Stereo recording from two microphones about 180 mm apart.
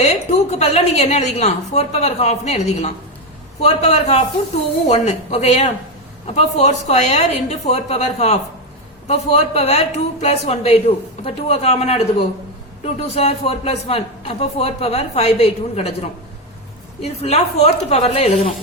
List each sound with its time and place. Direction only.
0.0 s a man's voice: 35° left (ahead or behind)
17.0 s a man's voice: 35° left (ahead or behind)